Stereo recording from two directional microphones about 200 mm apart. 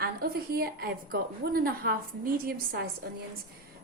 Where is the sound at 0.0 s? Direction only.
50° right (ahead or behind).